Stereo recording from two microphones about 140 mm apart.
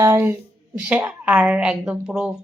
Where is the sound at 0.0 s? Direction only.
15° right (ahead or behind).